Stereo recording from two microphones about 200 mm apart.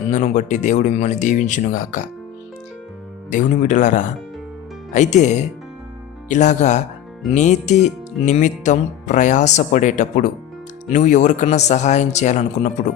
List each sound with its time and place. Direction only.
0.1 s speech: 35° left (ahead or behind)
3.2 s speech: 40° left (ahead or behind)